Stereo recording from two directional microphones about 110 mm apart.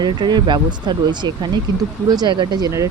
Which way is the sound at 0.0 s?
40° right (ahead or behind).